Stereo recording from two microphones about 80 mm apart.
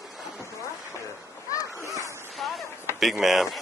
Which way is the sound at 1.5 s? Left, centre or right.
Left.